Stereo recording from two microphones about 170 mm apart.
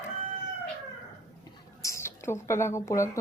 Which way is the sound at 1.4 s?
15° left (ahead or behind).